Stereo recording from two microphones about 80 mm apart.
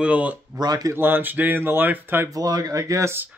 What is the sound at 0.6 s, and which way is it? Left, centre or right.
Speech, right.